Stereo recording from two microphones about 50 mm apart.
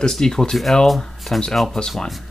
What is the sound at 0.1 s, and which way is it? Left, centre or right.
Speech, centre.